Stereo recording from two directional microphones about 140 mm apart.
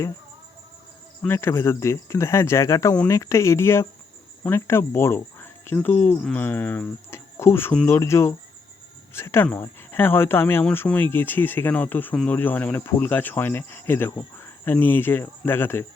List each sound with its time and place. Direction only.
1.3 s speech: 15° left (ahead or behind)